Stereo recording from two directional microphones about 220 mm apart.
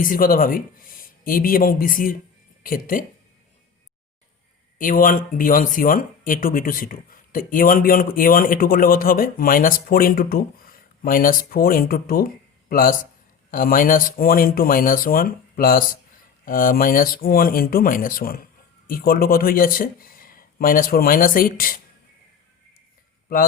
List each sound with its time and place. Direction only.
0.0 s speech: 40° left (ahead or behind)
4.8 s speech: 40° left (ahead or behind)